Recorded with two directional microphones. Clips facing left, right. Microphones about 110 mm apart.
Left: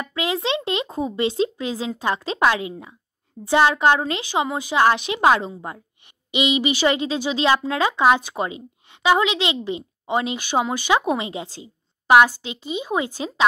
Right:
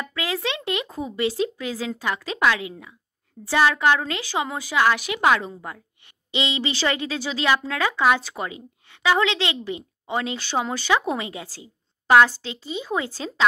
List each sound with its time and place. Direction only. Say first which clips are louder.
0.0 s speech: left 3 dB; 20° left (ahead or behind)
6.3 s speech: left 5 dB; 15° left (ahead or behind)